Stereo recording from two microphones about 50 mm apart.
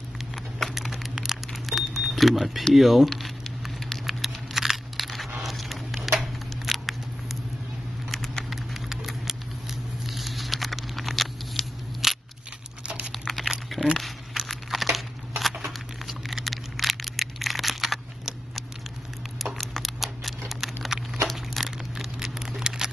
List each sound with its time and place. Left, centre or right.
0.7 s a sound: centre
1.5 s keys jangling: centre
2.7 s speech: centre
3.1 s crumpling: centre
5.4 s a sound: centre
6.1 s scissors: centre
8.1 s patter: centre
8.5 s patter: centre
12.8 s crumpling: right
13.9 s crumpling: centre
15.6 s a sound: centre